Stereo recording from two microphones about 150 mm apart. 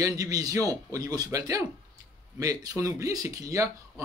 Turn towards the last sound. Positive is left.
turn(degrees=-20)  # may be behind; listen again after turning